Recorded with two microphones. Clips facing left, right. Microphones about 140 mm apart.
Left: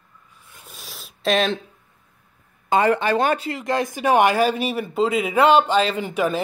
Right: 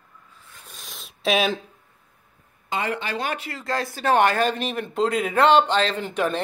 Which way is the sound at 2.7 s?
45° left (ahead or behind).